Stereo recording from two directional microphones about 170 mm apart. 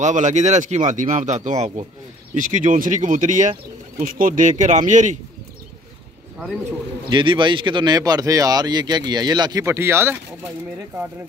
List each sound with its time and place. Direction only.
0.0 s speech: 45° right (ahead or behind)
7.1 s speech: 30° right (ahead or behind)